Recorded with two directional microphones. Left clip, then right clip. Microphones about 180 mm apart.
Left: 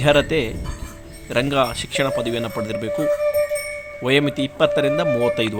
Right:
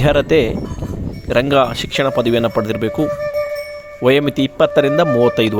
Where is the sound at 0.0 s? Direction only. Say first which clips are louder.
Right 4 dB; 45° right (ahead or behind).